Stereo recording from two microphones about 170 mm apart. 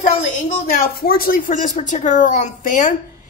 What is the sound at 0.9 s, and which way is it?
Speech, 60° left (ahead or behind).